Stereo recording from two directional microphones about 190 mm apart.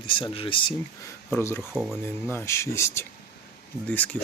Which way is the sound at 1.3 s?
10° left (ahead or behind).